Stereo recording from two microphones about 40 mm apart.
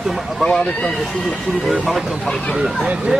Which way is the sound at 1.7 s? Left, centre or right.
Centre.